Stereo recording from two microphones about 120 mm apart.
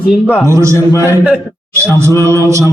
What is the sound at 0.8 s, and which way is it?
Mantra, 25° left (ahead or behind).